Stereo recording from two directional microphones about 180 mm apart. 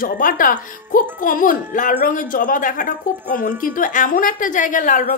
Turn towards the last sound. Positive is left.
turn(degrees=45)  # may be behind; listen again after turning